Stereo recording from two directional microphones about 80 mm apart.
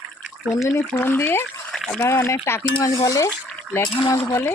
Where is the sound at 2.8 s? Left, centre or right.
Left.